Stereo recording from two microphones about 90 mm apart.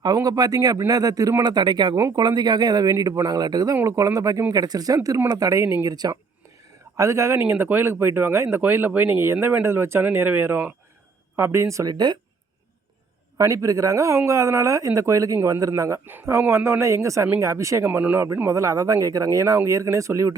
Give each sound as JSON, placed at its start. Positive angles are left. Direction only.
{"t": 0.0, "sound": "speech", "side_deg": -45}
{"t": 6.9, "sound": "speech", "side_deg": -35}
{"t": 13.4, "sound": "speech", "side_deg": -40}
{"t": 16.0, "sound": "speech", "side_deg": -25}